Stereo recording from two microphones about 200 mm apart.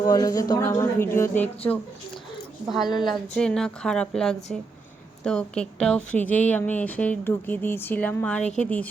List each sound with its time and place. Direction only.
0.1 s a woman's voice: 20° left (ahead or behind); by 2.9 s centre (ahead or behind)
2.9 s a woman's voice: 20° left (ahead or behind)
3.3 s a woman's voice: 5° left (ahead or behind)